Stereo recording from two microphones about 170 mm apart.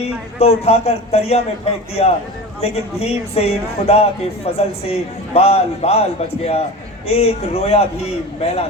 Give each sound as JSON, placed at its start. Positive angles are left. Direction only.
{"t": 0.0, "sound": "speech", "side_deg": 40}